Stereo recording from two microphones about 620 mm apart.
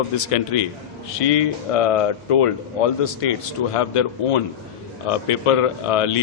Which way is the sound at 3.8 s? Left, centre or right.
Left.